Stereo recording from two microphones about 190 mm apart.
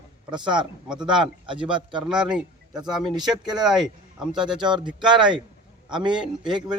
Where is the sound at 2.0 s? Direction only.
5° right (ahead or behind).